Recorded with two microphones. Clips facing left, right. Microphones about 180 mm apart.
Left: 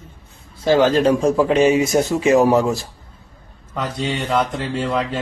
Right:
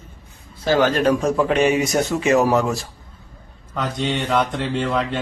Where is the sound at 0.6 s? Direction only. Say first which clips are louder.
Left 3 dB; 25° left (ahead or behind).